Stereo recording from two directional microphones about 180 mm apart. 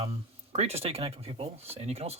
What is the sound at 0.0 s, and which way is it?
Speech, 35° right (ahead or behind).